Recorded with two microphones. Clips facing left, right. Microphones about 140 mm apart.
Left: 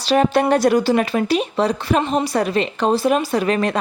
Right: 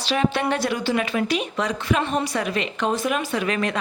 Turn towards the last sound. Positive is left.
turn(degrees=35)  # may be behind; listen again after turning